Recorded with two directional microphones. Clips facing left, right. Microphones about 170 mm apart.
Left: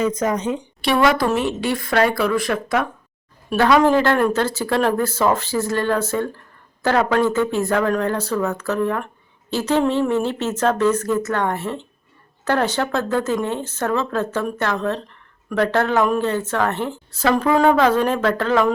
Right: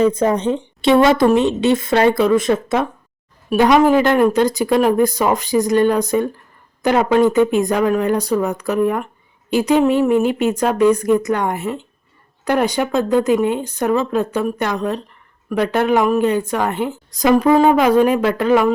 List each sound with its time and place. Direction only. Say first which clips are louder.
0.0 s a woman's voice: right 5 dB; 30° right (ahead or behind); by 18.7 s 10° right (ahead or behind)